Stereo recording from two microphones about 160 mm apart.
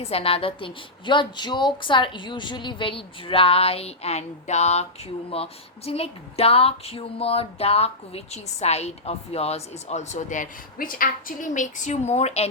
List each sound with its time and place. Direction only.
0.0 s a woman's voice: 40° left (ahead or behind)